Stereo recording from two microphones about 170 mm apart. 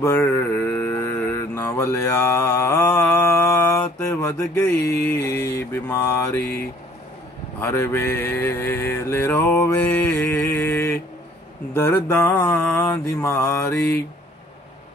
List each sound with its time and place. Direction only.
0.0 s mantra: 15° left (ahead or behind)
7.7 s mantra: 15° left (ahead or behind)